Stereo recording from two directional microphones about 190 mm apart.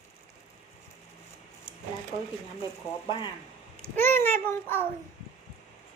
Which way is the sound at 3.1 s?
25° left (ahead or behind).